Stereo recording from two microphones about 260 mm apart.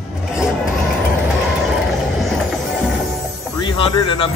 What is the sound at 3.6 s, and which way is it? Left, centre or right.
Speech, centre.